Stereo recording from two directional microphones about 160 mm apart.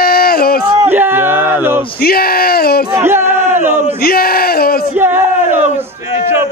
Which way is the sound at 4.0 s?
70° left (ahead or behind).